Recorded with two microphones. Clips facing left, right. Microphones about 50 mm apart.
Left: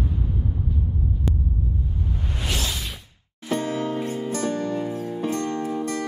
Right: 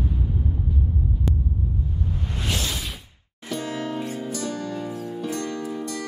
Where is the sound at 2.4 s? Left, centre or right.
Centre.